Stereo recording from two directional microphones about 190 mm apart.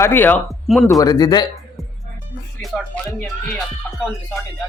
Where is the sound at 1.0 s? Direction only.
20° left (ahead or behind).